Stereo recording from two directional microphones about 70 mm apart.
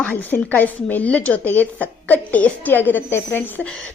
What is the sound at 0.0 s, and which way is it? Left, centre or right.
Speech, left.